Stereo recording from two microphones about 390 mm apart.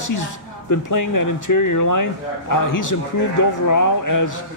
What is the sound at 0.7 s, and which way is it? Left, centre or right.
A man's voice, left.